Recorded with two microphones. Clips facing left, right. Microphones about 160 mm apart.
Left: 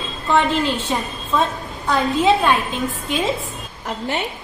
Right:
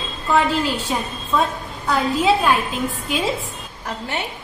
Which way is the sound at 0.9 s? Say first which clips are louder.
Even; 5° right (ahead or behind).